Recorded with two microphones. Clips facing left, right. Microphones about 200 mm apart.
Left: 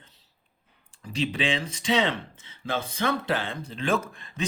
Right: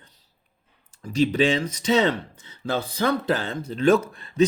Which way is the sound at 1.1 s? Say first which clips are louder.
Right 7 dB; 40° right (ahead or behind).